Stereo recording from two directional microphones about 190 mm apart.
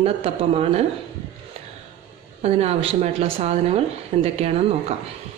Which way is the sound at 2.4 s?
35° right (ahead or behind).